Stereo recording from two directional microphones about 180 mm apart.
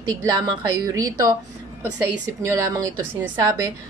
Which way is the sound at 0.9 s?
20° right (ahead or behind).